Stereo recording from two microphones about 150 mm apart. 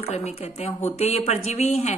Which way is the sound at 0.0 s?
45° left (ahead or behind).